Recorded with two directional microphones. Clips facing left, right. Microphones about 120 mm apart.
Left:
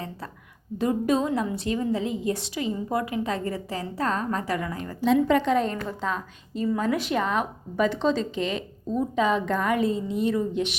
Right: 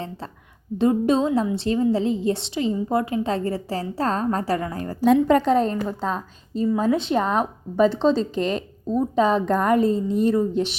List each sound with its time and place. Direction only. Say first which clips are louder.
0.8 s a woman's voice: right 4 dB; 25° right (ahead or behind)